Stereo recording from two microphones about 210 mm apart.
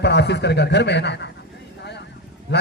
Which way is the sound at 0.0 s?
55° left (ahead or behind).